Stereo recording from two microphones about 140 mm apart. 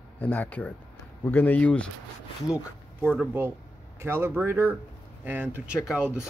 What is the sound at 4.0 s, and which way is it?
Speech, 15° right (ahead or behind).